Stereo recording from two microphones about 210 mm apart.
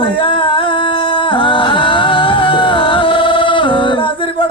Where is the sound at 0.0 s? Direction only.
25° left (ahead or behind).